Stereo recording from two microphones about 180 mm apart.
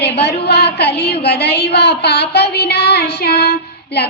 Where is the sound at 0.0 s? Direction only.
65° left (ahead or behind).